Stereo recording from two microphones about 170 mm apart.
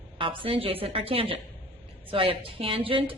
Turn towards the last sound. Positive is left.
turn(degrees=-30)  # may be behind; listen again after turning